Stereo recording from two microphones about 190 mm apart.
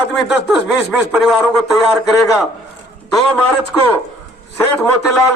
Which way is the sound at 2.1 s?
15° left (ahead or behind).